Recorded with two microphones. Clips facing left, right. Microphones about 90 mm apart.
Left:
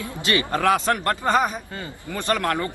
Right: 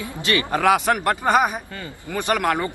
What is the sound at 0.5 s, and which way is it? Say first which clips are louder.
A man's voice: right 3 dB; 15° right (ahead or behind).